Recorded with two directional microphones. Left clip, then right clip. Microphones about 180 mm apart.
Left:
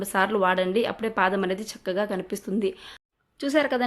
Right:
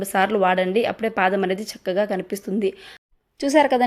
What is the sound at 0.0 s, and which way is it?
Speech, 15° right (ahead or behind).